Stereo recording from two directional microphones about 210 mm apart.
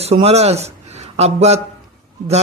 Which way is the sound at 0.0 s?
30° right (ahead or behind).